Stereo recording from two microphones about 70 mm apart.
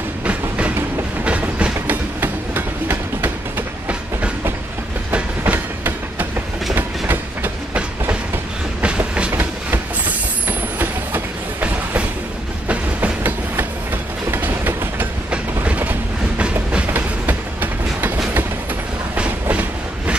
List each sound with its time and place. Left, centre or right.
0.2 s train: centre
2.1 s train: right
5.4 s train: right
8.8 s train: centre
9.3 s train: right
19.1 s train: centre